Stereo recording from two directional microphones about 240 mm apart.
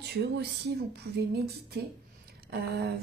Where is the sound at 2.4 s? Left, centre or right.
Right.